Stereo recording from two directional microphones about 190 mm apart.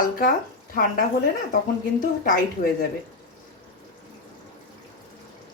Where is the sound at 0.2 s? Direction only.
45° left (ahead or behind).